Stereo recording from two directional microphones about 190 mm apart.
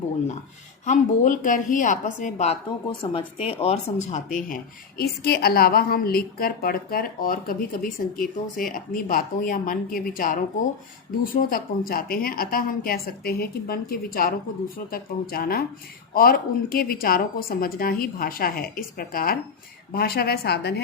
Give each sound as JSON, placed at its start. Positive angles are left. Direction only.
{"t": 0.9, "sound": "a woman's voice", "side_deg": 45}
{"t": 2.6, "sound": "a woman's voice", "side_deg": 25}